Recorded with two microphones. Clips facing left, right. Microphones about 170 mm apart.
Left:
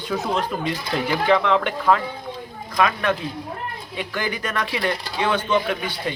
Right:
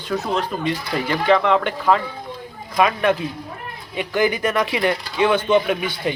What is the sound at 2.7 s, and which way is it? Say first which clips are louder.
A man's voice: right 3 dB; 15° right (ahead or behind).